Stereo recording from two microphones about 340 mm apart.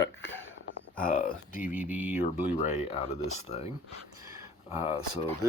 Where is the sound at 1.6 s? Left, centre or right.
Centre.